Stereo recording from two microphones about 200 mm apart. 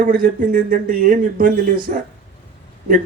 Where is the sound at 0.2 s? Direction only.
45° right (ahead or behind).